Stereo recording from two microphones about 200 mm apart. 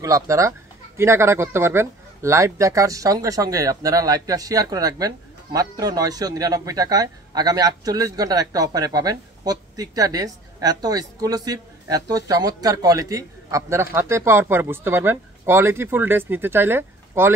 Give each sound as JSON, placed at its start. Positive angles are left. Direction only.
{"t": 0.0, "sound": "speech", "side_deg": -15}